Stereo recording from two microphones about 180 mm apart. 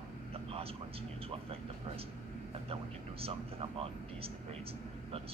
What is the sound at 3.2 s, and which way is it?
Speech, 30° right (ahead or behind).